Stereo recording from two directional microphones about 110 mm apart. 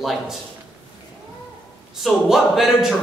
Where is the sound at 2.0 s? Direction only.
Centre (ahead or behind).